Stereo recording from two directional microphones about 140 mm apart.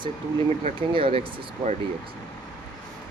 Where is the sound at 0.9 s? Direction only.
40° right (ahead or behind).